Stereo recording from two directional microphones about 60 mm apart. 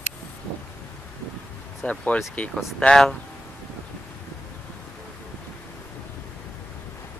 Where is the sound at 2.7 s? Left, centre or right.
Centre.